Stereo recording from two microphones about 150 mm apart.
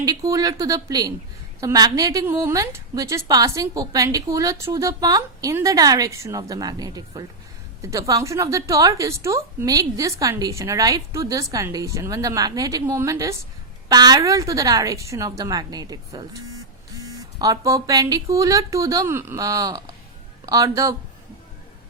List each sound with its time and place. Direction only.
0.0 s a woman's voice: 25° right (ahead or behind)